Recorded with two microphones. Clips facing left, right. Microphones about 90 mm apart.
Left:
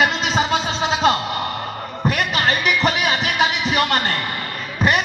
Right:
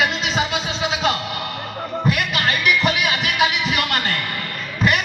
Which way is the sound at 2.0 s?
35° left (ahead or behind).